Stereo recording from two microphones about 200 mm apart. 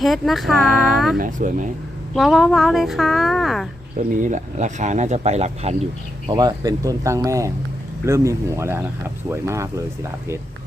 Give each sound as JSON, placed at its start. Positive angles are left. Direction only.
{"t": 0.0, "sound": "a woman's voice", "side_deg": 0}
{"t": 0.7, "sound": "speech", "side_deg": -45}
{"t": 2.1, "sound": "a woman's voice", "side_deg": 0}
{"t": 4.1, "sound": "speech", "side_deg": -40}
{"t": 6.2, "sound": "speech", "side_deg": -20}